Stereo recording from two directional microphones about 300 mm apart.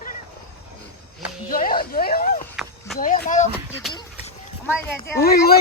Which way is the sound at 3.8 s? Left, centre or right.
Centre.